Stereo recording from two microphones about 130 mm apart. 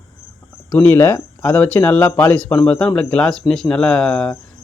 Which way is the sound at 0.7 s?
15° left (ahead or behind).